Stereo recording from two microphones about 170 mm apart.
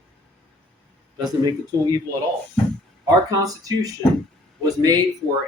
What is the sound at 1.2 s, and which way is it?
Speech, 25° right (ahead or behind).